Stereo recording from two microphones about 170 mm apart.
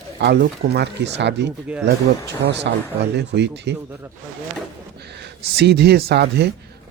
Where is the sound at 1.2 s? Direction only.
90° right.